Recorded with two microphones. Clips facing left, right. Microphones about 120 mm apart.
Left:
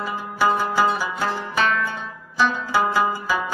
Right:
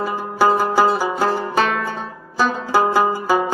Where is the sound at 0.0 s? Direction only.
40° right (ahead or behind).